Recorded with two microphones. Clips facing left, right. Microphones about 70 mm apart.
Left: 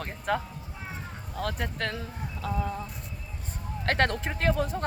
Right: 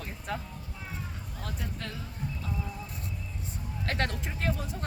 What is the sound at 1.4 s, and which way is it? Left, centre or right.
Speech, left.